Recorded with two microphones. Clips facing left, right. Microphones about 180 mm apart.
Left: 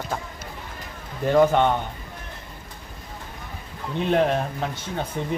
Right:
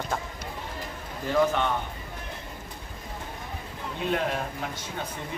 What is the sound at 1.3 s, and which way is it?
Speech, 55° left (ahead or behind).